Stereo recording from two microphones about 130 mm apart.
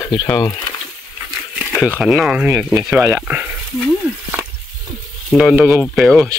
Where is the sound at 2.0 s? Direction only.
5° right (ahead or behind).